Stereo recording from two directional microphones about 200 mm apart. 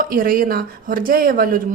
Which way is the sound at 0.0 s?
45° right (ahead or behind).